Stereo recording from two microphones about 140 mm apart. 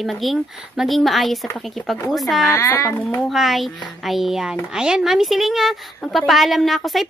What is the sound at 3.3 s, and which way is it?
A woman's voice, centre (ahead or behind).